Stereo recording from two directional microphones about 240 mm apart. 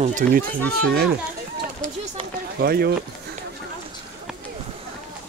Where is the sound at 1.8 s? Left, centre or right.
Right.